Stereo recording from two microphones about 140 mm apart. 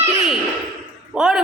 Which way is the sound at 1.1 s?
5° right (ahead or behind).